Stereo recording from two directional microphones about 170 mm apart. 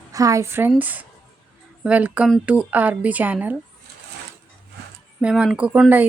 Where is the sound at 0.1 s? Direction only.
20° right (ahead or behind).